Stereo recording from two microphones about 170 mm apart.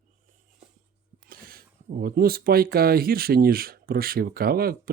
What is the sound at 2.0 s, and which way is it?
Speech, 60° right (ahead or behind).